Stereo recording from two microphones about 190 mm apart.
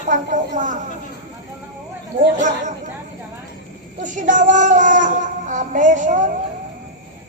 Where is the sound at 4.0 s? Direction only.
40° right (ahead or behind).